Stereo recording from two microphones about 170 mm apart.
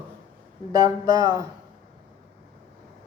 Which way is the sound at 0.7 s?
20° right (ahead or behind).